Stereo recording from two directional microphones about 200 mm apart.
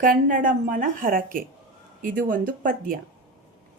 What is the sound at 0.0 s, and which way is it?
A woman's voice, 40° right (ahead or behind).